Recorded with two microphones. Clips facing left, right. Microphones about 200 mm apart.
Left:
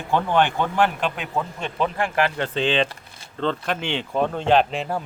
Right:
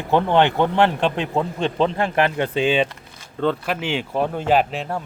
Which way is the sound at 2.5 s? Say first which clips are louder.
Right 2 dB; 10° right (ahead or behind).